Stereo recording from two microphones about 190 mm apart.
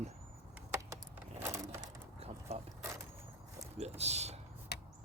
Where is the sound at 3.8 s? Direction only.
35° right (ahead or behind).